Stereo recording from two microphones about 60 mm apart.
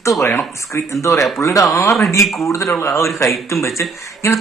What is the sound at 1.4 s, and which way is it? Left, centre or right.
A man's voice, left.